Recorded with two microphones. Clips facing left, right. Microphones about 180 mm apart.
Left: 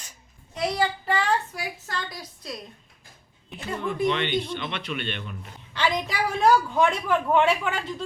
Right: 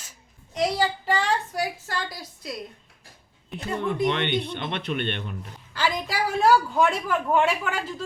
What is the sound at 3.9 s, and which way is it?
A man's voice, 60° right (ahead or behind).